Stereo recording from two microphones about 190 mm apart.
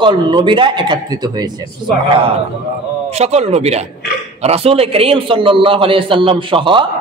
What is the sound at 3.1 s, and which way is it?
A man's voice, 35° right (ahead or behind).